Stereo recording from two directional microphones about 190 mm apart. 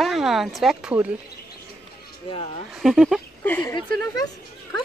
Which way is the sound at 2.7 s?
Centre (ahead or behind).